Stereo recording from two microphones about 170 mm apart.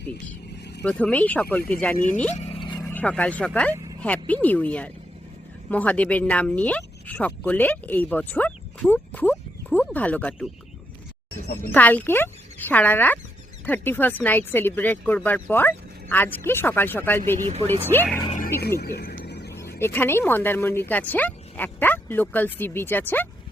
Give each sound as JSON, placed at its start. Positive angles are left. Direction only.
{"t": 0.9, "sound": "speech", "side_deg": 10}
{"t": 2.0, "sound": "speech", "side_deg": 50}
{"t": 2.3, "sound": "a sound", "side_deg": 30}
{"t": 2.7, "sound": "speech", "side_deg": 10}
{"t": 11.7, "sound": "speech", "side_deg": 10}
{"t": 18.3, "sound": "wild animals", "side_deg": 50}
{"t": 18.8, "sound": "speech", "side_deg": 70}
{"t": 19.2, "sound": "a sound", "side_deg": 80}
{"t": 19.5, "sound": "speech", "side_deg": 15}